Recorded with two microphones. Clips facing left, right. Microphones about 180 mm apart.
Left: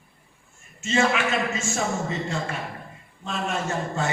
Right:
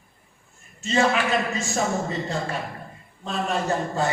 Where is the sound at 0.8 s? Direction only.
35° right (ahead or behind).